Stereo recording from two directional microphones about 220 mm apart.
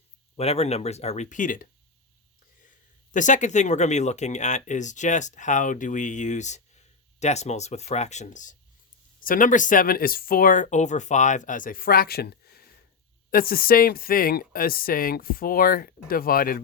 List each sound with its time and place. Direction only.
0.3 s speech: 30° left (ahead or behind)
3.1 s speech: 35° left (ahead or behind)